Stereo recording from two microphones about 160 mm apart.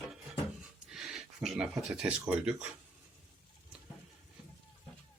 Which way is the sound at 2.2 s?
10° right (ahead or behind).